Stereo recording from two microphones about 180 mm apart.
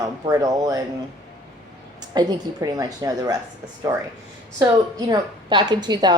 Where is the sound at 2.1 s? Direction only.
20° right (ahead or behind).